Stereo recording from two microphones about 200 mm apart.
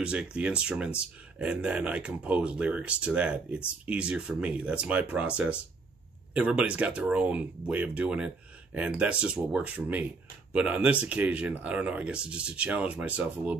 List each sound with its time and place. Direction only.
0.0 s speech: 5° right (ahead or behind)